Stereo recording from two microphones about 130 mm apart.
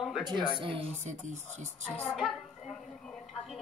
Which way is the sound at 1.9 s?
5° left (ahead or behind).